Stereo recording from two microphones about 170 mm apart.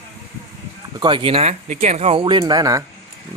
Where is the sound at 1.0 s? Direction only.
30° right (ahead or behind).